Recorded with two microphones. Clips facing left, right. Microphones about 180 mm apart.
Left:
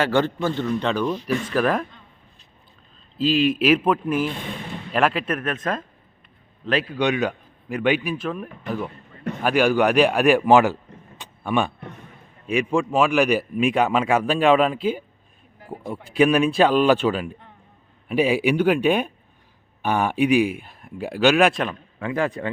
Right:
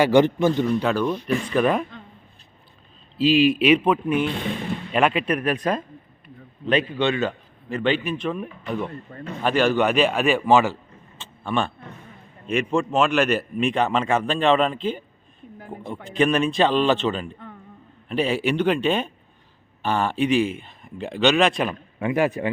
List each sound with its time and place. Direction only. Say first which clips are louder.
0.0 s a man's voice: right 4 dB; 15° right (ahead or behind); by 1.8 s centre (ahead or behind)
3.4 s speech: right 1 dB; centre (ahead or behind)
7.0 s a man's voice: left 1 dB; 15° left (ahead or behind)
11.2 s a sound: left 2 dB; 15° left (ahead or behind)
12.5 s a man's voice: left 1 dB; 10° left (ahead or behind)
16.0 s a man's voice: left 3 dB; 10° left (ahead or behind)
21.9 s speech: right 4 dB; 20° right (ahead or behind)
22.2 s a man's voice: right 2 dB; 10° right (ahead or behind)